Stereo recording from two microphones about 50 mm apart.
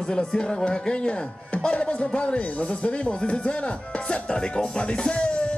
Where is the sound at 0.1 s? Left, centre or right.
Centre.